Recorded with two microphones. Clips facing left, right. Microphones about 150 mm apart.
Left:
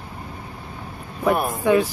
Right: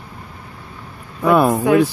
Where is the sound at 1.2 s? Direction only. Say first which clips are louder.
Right 7 dB; 85° right.